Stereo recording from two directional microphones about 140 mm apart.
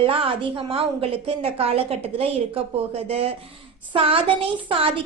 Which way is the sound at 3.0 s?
45° right (ahead or behind).